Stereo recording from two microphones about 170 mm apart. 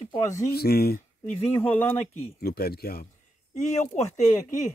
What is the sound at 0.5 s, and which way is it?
Speech, 65° left (ahead or behind).